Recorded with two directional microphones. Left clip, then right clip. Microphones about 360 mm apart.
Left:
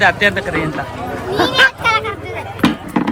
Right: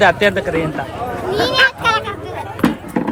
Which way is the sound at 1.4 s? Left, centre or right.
Centre.